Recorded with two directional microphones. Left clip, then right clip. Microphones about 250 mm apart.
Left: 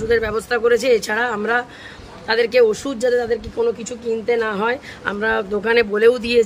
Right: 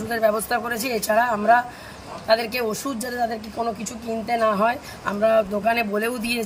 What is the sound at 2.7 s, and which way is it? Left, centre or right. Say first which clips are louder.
Speech: left 6 dB; centre.